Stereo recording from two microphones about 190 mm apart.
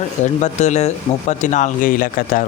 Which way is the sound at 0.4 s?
35° left (ahead or behind).